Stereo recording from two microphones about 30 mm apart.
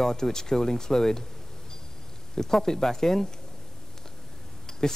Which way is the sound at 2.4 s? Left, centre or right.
Centre.